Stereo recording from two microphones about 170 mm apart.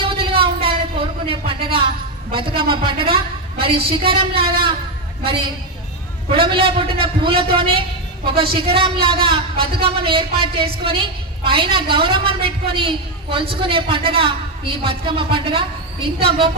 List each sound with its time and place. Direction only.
0.0 s a sound: 30° right (ahead or behind)
2.3 s a woman's voice: 30° right (ahead or behind)
6.3 s a woman's voice: 30° right (ahead or behind)